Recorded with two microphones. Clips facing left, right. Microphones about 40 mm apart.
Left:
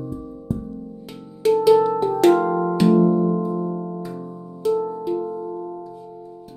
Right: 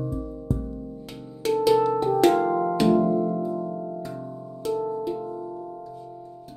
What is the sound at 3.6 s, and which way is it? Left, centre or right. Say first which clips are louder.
Music: left 4 dB; centre.